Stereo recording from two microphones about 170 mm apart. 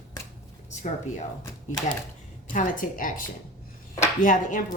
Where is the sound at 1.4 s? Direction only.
20° left (ahead or behind).